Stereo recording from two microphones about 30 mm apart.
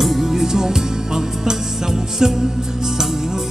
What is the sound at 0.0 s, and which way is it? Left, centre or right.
Music, centre.